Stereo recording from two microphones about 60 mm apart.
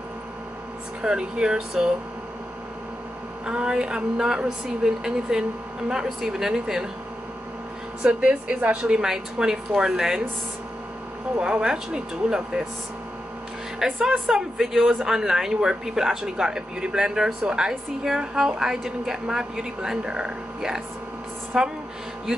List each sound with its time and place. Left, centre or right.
1.0 s speech: centre
3.4 s speech: centre
8.0 s a woman's voice: centre
9.0 s speech: centre
11.3 s speech: centre
13.7 s a man's voice: centre